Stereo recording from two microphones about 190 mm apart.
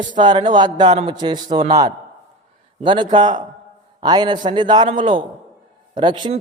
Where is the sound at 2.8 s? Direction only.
25° right (ahead or behind).